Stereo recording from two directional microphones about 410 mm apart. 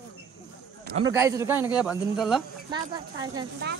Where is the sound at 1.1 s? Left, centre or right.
Centre.